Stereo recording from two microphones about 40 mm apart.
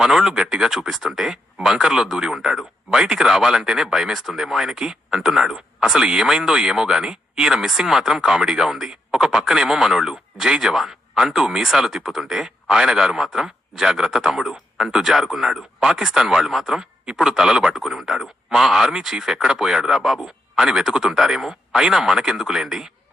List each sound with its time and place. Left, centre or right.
0.0 s speech: centre
0.9 s speech: centre
8.9 s radio: centre
9.6 s speech: centre
20.0 s speech: centre
20.6 s speech: centre